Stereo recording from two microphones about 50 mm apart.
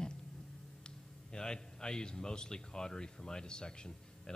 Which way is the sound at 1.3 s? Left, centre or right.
Centre.